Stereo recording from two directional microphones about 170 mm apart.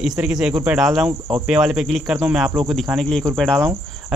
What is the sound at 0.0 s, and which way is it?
Speech, 5° right (ahead or behind).